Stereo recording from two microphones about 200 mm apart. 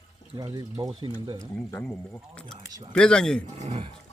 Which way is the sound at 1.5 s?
5° left (ahead or behind).